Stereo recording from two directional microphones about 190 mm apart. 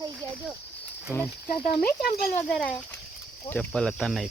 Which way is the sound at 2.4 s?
5° left (ahead or behind).